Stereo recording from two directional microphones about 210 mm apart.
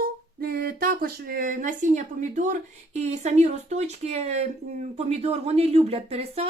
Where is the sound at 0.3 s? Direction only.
45° right (ahead or behind).